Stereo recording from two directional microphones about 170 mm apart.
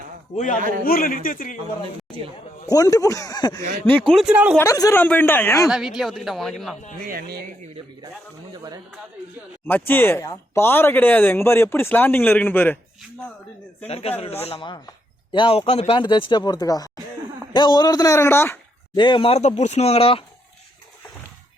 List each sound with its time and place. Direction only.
0.9 s a man's voice: 55° left (ahead or behind)
1.8 s speech: 30° right (ahead or behind)
2.6 s speech: 20° left (ahead or behind)
4.1 s speech: 5° right (ahead or behind)
4.5 s speech: 20° left (ahead or behind)
5.6 s speech: centre (ahead or behind)
7.1 s speech: 65° right (ahead or behind)
9.6 s speech: 10° left (ahead or behind)
13.8 s speech: 35° left (ahead or behind); by 18.5 s 15° left (ahead or behind)
18.9 s speech: 30° left (ahead or behind)